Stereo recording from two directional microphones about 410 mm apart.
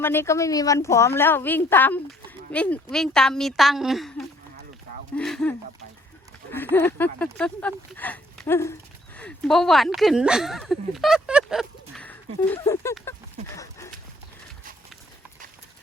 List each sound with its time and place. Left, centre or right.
0.0 s a woman's voice: centre